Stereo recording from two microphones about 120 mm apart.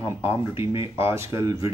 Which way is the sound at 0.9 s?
20° right (ahead or behind).